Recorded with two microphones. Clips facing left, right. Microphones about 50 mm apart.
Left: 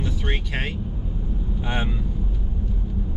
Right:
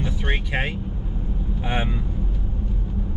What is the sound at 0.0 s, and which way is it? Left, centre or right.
Vehicle, centre.